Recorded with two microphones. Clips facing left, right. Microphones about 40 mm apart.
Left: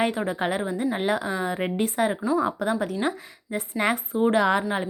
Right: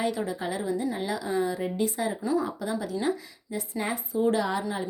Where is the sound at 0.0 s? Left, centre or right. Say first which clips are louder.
Left 4 dB; left.